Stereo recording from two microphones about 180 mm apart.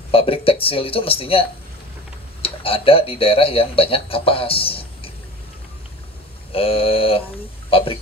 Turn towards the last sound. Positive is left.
turn(degrees=30)  # may be behind; listen again after turning